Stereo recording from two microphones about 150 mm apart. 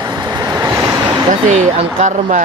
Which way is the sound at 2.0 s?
50° right (ahead or behind).